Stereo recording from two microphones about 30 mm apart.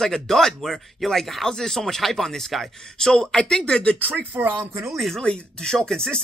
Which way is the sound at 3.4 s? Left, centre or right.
Left.